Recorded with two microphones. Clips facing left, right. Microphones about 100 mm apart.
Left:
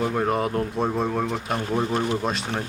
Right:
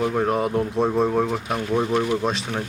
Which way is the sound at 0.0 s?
Centre (ahead or behind).